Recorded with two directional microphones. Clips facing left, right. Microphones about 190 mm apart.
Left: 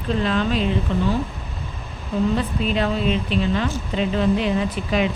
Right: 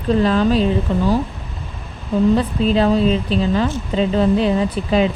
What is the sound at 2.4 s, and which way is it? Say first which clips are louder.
Speech: right 6 dB; 35° right (ahead or behind).